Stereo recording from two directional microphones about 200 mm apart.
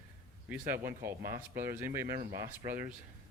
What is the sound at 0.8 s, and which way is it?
Speech, 45° right (ahead or behind).